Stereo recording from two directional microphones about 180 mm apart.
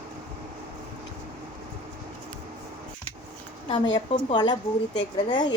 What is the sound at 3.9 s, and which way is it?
Speech, 25° left (ahead or behind).